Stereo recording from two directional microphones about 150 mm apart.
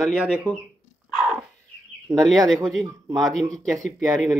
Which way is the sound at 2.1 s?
Centre (ahead or behind).